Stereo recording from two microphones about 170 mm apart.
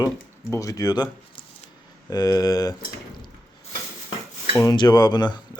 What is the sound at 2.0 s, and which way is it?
Speech, 20° left (ahead or behind).